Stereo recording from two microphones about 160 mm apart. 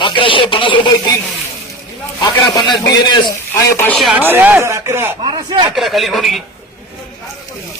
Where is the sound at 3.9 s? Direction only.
Centre (ahead or behind); by 5.1 s 15° right (ahead or behind).